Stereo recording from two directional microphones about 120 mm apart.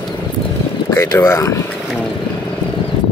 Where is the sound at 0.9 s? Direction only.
25° left (ahead or behind).